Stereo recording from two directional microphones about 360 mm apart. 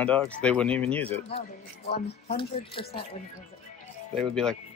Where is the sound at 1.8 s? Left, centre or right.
Left.